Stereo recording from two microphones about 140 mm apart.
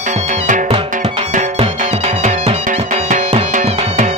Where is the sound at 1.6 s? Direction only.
50° right (ahead or behind).